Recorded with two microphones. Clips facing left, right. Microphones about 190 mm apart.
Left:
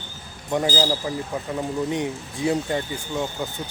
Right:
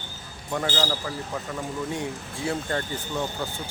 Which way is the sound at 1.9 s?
20° left (ahead or behind).